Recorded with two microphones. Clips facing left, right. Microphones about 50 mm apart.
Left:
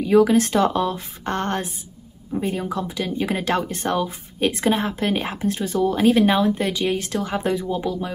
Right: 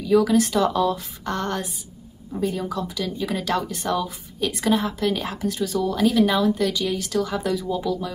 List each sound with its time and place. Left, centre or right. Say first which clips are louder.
0.0 s speech: left 2 dB; left